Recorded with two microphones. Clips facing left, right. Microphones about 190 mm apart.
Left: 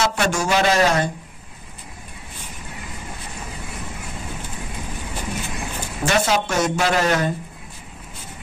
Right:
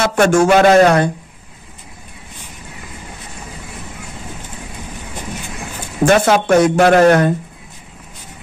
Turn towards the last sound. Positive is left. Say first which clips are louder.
# right 10 dB
turn(degrees=-55)  # may be behind; listen again after turning